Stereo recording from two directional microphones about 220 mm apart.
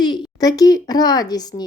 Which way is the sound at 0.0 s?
20° left (ahead or behind).